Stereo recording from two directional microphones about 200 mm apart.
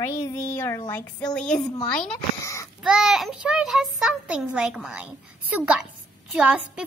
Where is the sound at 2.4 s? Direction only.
15° left (ahead or behind).